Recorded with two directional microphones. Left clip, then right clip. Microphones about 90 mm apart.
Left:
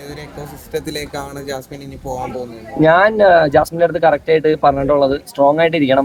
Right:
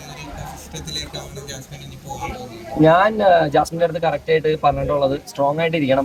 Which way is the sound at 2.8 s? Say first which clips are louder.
Left 3 dB; 35° left (ahead or behind).